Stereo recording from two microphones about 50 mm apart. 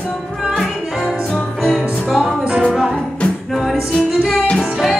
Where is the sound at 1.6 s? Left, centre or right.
Centre.